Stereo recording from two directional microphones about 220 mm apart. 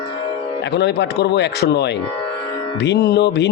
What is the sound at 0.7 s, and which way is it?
Speech, 50° left (ahead or behind).